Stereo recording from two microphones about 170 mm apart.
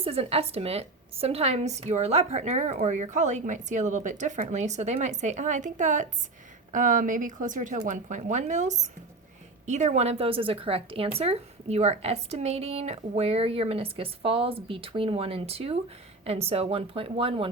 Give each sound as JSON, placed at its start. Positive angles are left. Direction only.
{"t": 0.0, "sound": "a woman's voice", "side_deg": -35}